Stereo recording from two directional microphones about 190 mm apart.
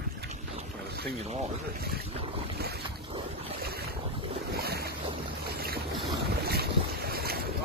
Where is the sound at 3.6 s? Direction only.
55° right (ahead or behind).